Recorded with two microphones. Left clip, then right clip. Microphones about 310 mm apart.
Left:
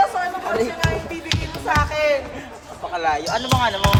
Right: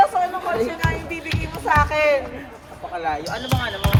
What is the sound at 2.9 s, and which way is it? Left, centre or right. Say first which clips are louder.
Speech: left 4 dB; left.